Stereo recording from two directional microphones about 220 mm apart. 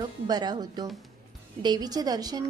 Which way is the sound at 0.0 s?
20° right (ahead or behind).